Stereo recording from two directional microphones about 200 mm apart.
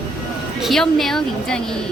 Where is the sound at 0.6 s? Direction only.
Centre (ahead or behind).